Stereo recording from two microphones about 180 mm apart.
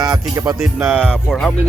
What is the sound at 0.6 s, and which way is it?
Music, 5° right (ahead or behind).